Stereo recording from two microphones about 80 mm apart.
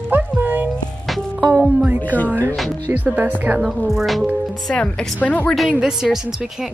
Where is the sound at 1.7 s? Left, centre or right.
Centre.